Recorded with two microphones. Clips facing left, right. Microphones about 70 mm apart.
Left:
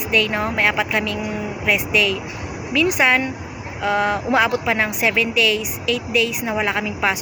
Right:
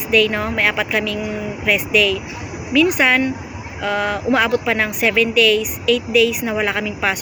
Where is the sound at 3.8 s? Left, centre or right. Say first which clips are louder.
Left 1 dB; centre.